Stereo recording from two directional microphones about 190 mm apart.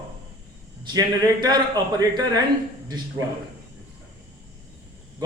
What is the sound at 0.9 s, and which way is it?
A man's voice, 20° right (ahead or behind).